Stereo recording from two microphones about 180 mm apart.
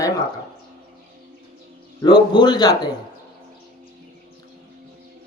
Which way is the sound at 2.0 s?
25° left (ahead or behind).